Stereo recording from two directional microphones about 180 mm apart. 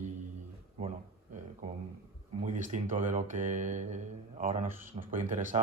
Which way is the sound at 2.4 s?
45° right (ahead or behind).